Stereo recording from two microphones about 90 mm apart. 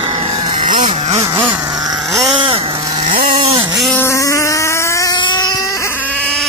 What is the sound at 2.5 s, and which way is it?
Vehicle, 85° right.